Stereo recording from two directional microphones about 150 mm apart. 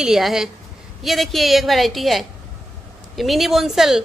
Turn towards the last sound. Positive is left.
turn(degrees=0)  # may be behind; listen again after turning